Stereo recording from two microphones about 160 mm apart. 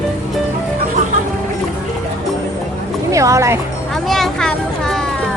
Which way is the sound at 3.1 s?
20° right (ahead or behind).